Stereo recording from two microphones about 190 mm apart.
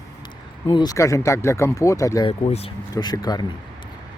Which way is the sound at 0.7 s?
20° left (ahead or behind).